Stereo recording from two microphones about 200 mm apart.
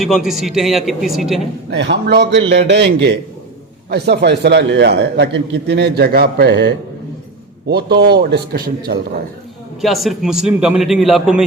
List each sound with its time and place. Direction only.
0.0 s a man's voice: centre (ahead or behind)
1.7 s a man's voice: 60° right (ahead or behind)
9.8 s a man's voice: centre (ahead or behind)